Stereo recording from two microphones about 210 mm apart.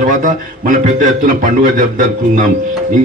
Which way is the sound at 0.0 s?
40° right (ahead or behind).